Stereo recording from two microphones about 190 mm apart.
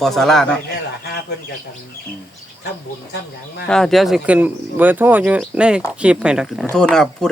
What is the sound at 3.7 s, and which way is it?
Speech, centre (ahead or behind).